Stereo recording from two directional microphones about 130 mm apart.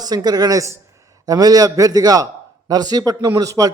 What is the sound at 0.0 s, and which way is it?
A man's voice, 30° right (ahead or behind).